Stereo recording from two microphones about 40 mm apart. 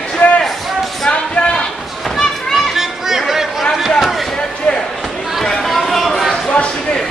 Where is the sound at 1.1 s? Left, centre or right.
Left.